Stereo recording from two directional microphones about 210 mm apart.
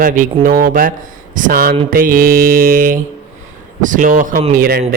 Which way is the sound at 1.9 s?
45° right (ahead or behind).